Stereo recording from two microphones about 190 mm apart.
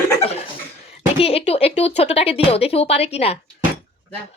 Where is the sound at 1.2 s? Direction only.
30° left (ahead or behind).